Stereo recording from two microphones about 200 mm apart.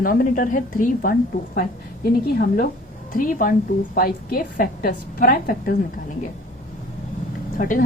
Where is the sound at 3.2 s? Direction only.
45° left (ahead or behind).